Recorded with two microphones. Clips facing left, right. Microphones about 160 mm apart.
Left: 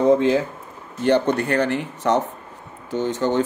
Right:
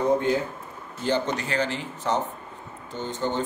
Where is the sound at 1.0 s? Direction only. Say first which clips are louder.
Left 7 dB; 60° left (ahead or behind).